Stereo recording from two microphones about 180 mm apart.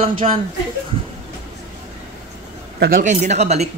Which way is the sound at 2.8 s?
50° right (ahead or behind).